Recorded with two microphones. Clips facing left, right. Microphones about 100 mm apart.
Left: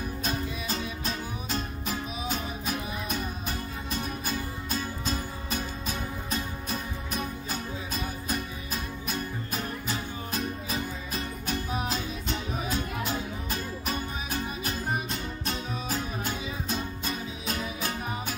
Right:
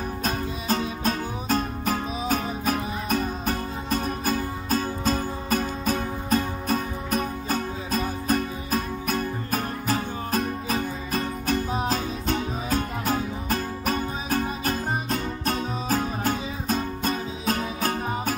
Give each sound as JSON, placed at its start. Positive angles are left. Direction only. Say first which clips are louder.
{"t": 0.2, "sound": "music", "louder": "right 3 dB", "side_deg": -45}